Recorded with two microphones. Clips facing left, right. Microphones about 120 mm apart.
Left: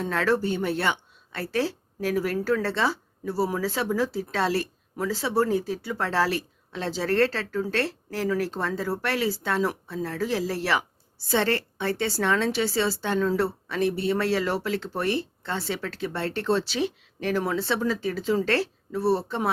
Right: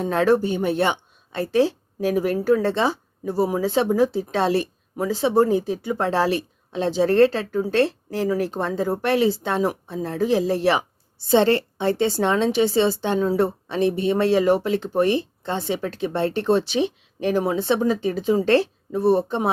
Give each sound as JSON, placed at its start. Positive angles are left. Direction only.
{"t": 0.0, "sound": "speech", "side_deg": -20}